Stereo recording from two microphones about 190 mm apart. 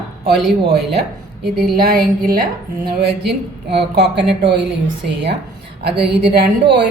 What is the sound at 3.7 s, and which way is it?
Speech, 60° right (ahead or behind).